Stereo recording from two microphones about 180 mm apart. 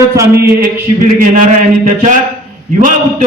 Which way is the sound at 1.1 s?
50° right (ahead or behind).